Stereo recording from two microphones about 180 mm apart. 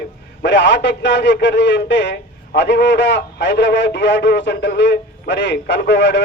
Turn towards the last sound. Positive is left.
turn(degrees=75)  # may be behind; listen again after turning